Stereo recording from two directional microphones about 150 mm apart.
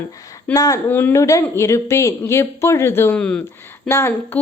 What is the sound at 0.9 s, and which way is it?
Speech, 10° left (ahead or behind).